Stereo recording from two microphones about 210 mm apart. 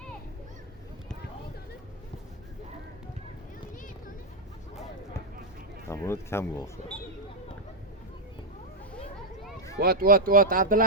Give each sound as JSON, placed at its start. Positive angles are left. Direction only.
{"t": 5.9, "sound": "speech", "side_deg": 10}
{"t": 9.7, "sound": "speech", "side_deg": -45}